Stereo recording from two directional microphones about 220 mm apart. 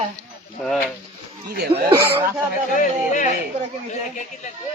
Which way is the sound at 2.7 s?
35° left (ahead or behind).